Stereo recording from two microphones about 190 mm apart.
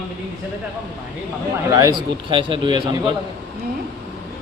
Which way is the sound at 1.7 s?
20° right (ahead or behind).